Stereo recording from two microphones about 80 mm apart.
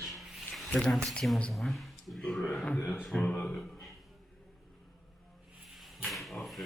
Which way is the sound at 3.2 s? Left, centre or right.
Centre.